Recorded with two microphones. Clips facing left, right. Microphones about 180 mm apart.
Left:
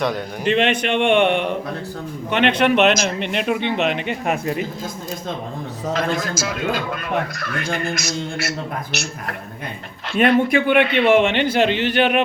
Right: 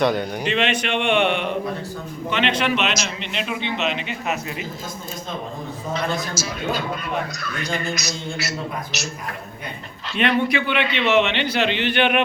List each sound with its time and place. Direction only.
0.0 s a man's voice: centre (ahead or behind)
0.4 s a man's voice: 50° left (ahead or behind)
6.0 s a man's voice: 90° left
7.3 s a man's voice: 55° left (ahead or behind)
10.1 s a man's voice: 50° left (ahead or behind)